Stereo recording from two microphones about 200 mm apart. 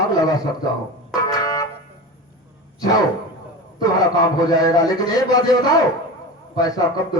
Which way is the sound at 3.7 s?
20° left (ahead or behind).